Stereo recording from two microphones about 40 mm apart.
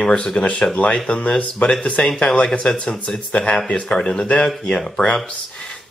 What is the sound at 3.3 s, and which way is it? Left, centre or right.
Speech, left.